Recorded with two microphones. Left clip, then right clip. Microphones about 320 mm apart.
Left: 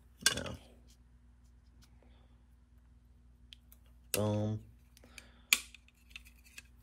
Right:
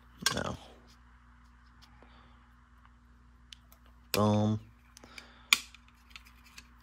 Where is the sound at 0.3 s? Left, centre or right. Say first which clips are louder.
Right 3 dB; centre.